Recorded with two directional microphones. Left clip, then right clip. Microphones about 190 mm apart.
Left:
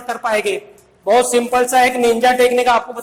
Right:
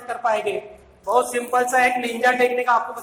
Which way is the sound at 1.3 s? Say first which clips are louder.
Left 6 dB; 50° left (ahead or behind).